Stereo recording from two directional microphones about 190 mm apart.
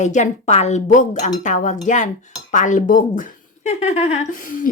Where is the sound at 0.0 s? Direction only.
40° left (ahead or behind).